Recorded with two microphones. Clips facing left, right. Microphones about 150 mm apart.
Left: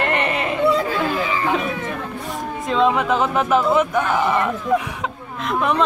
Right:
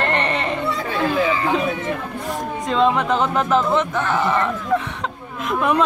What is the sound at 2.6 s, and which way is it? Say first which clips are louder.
Speech: even; centre (ahead or behind).